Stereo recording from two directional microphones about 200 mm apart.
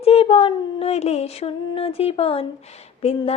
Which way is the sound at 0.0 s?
30° left (ahead or behind).